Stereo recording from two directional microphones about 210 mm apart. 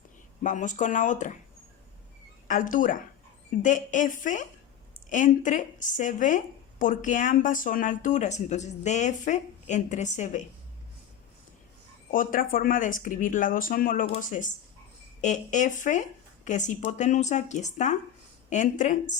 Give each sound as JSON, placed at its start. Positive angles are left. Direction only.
{"t": 0.4, "sound": "speech", "side_deg": 35}
{"t": 2.5, "sound": "speech", "side_deg": 40}
{"t": 12.1, "sound": "speech", "side_deg": 40}